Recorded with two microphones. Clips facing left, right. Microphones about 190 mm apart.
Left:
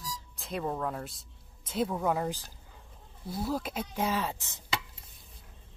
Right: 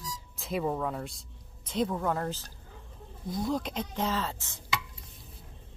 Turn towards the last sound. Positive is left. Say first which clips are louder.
# left 1 dB
turn(degrees=15)  # may be behind; listen again after turning